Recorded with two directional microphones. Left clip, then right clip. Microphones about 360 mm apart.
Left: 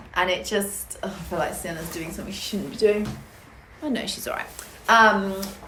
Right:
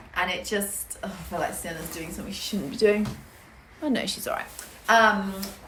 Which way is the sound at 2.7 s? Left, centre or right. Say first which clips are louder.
Left 1 dB; centre.